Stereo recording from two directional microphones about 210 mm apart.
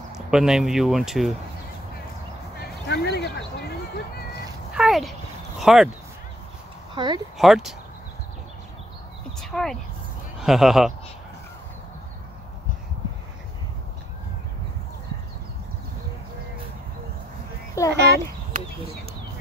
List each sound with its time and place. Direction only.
0.3 s speech: 5° right (ahead or behind)
2.9 s a sound: 50° left (ahead or behind)
4.7 s speech: centre (ahead or behind)
7.0 s speech: 20° right (ahead or behind)
7.3 s speech: centre (ahead or behind)
9.4 s a sound: centre (ahead or behind)
10.4 s speech: centre (ahead or behind)
17.9 s a child's voice: 50° right (ahead or behind)